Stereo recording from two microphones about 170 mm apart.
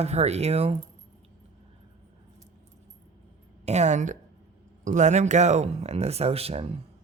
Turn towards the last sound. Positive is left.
turn(degrees=-35)  # may be behind; listen again after turning